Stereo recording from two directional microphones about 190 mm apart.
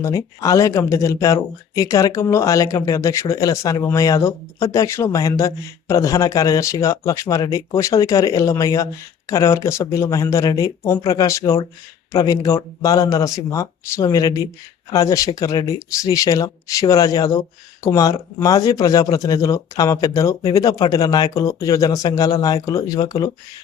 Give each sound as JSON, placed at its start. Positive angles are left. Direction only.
{"t": 0.0, "sound": "speech", "side_deg": 15}